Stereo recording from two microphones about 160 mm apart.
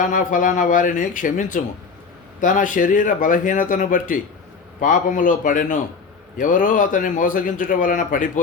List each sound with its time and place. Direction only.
0.0 s a man's voice: 55° left (ahead or behind)